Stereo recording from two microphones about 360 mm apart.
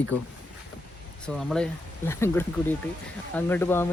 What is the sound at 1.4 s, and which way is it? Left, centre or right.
Speech, centre.